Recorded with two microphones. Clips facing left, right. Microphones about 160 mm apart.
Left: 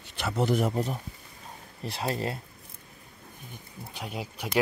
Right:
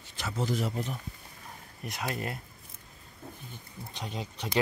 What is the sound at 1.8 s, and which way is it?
Speech, 30° left (ahead or behind).